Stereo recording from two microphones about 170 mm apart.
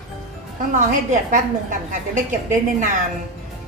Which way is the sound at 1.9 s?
50° right (ahead or behind).